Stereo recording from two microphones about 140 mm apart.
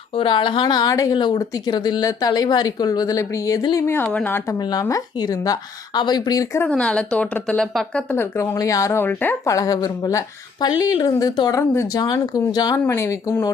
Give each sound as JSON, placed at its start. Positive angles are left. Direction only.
{"t": 0.2, "sound": "a woman's voice", "side_deg": 35}
{"t": 4.7, "sound": "speech", "side_deg": 25}
{"t": 6.6, "sound": "a woman's voice", "side_deg": 10}
{"t": 8.1, "sound": "a woman's voice", "side_deg": 20}
{"t": 9.5, "sound": "speech", "side_deg": 25}
{"t": 12.8, "sound": "speech", "side_deg": 15}